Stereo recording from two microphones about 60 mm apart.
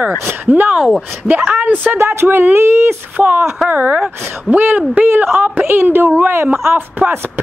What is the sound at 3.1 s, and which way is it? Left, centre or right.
A woman's voice, right.